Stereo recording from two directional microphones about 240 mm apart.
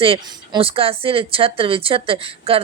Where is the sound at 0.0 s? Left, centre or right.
Right.